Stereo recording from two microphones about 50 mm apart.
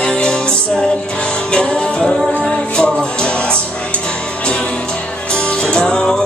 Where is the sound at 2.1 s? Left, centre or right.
Centre.